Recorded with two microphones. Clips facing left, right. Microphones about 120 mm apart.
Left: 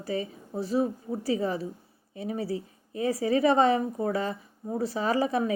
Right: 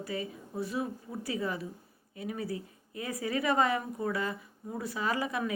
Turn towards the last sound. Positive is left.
turn(degrees=35)  # may be behind; listen again after turning